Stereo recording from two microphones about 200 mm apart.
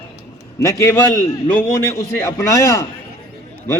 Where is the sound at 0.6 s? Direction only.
15° left (ahead or behind).